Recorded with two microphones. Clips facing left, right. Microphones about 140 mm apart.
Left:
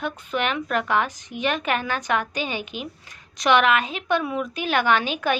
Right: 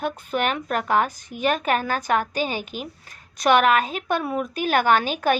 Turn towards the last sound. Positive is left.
turn(degrees=-45)  # may be behind; listen again after turning